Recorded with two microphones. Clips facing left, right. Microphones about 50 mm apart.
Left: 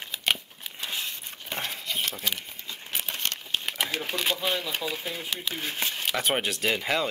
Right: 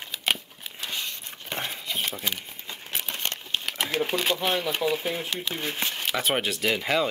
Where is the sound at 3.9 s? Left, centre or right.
Centre.